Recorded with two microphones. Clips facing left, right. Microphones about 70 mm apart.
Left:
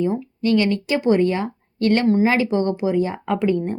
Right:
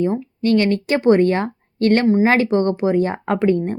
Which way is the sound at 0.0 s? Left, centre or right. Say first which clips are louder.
Right 2 dB; right.